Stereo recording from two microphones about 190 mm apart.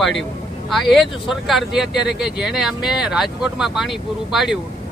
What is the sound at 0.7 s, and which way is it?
Speech, centre (ahead or behind).